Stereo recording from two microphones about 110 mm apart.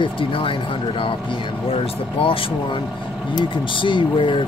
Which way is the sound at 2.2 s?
55° left (ahead or behind).